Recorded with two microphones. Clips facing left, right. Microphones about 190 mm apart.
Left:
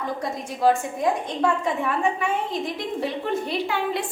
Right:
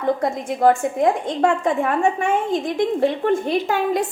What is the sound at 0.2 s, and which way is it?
A woman's voice, 50° right (ahead or behind).